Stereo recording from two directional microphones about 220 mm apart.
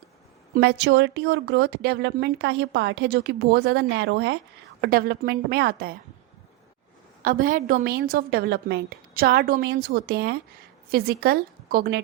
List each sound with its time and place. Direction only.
0.5 s speech: 50° right (ahead or behind)
7.2 s a woman's voice: 40° right (ahead or behind)